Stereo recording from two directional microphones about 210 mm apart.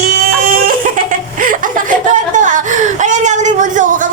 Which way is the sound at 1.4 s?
40° right (ahead or behind).